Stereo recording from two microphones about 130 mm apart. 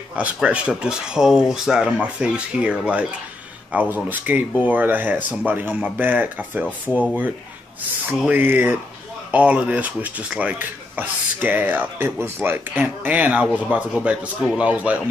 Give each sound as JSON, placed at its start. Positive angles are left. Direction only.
{"t": 0.1, "sound": "speech", "side_deg": -10}
{"t": 8.3, "sound": "speech", "side_deg": -15}